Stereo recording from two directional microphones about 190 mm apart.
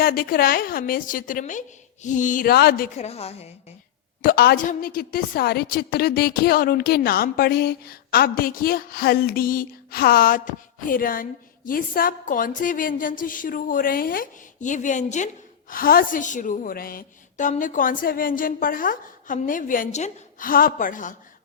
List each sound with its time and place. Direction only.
0.0 s a woman's voice: 50° left (ahead or behind)
3.0 s a woman's voice: 30° left (ahead or behind)
4.2 s a woman's voice: 50° left (ahead or behind)